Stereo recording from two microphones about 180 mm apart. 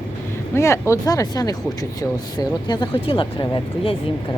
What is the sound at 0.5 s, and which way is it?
Speech, 15° left (ahead or behind).